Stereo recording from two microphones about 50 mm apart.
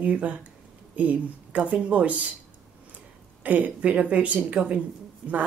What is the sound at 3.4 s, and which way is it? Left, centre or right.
Speech, right.